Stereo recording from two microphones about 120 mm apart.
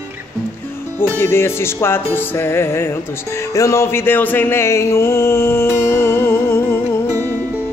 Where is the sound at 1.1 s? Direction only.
20° left (ahead or behind).